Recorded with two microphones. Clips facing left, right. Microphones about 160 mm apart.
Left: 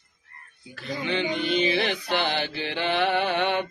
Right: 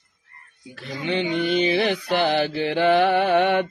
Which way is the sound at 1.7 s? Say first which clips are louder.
Right 4 dB; 35° right (ahead or behind).